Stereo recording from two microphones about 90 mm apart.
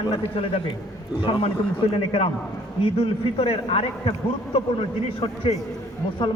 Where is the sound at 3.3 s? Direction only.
90° left.